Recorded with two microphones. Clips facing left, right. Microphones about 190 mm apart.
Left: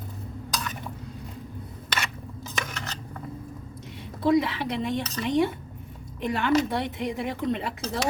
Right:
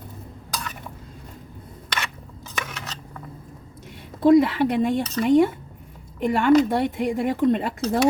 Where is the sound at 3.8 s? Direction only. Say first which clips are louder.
Right 7 dB; 50° right (ahead or behind).